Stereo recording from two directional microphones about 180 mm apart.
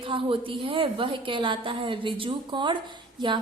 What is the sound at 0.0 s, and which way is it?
A woman's voice, 30° right (ahead or behind).